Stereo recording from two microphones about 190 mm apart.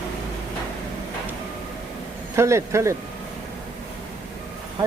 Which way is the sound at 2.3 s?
15° right (ahead or behind).